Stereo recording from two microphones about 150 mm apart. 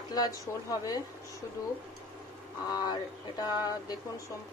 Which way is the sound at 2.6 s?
25° left (ahead or behind).